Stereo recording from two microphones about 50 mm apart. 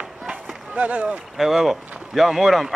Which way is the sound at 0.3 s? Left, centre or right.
Right.